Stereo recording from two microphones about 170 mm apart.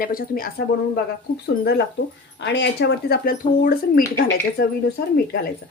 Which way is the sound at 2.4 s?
85° left.